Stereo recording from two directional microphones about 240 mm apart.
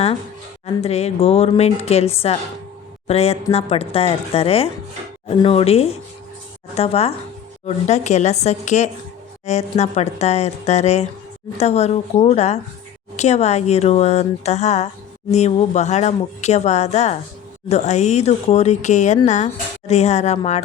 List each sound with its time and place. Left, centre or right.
0.8 s speech: left